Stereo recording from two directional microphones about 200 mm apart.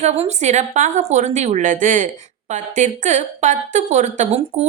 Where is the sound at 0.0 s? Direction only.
35° right (ahead or behind).